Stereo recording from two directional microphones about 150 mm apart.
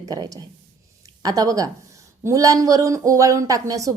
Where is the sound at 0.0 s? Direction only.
25° right (ahead or behind).